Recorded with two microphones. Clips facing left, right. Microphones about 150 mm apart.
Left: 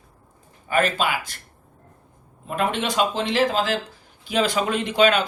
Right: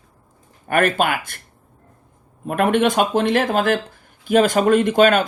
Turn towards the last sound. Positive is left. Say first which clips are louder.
# right 5 dB
turn(degrees=-50)  # may be behind; listen again after turning